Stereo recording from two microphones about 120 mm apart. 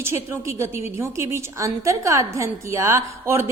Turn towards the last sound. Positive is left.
turn(degrees=-25)  # may be behind; listen again after turning